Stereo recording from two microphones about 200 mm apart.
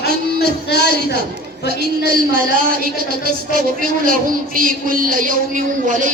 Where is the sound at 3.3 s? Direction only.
45° right (ahead or behind).